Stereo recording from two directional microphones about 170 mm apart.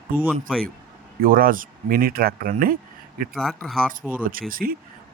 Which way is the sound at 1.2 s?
55° right (ahead or behind).